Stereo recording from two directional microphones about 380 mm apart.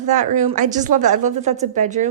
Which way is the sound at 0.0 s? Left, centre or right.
Centre.